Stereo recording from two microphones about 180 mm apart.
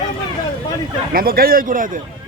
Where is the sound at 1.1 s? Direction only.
55° right (ahead or behind).